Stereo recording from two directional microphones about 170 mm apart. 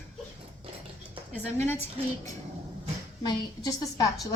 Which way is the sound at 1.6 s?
15° left (ahead or behind).